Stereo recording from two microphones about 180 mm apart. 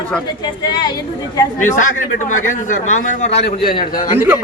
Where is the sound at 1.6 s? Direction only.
45° left (ahead or behind).